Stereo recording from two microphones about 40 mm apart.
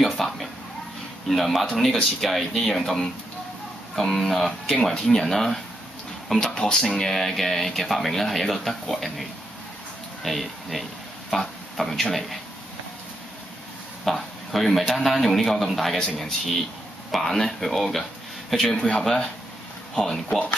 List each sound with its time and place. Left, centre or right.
0.1 s a man's voice: centre
6.6 s speech: left
7.0 s speech: centre
14.0 s speech: centre